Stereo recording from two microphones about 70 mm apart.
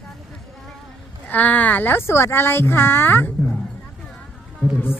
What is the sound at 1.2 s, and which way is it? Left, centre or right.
Speech, left.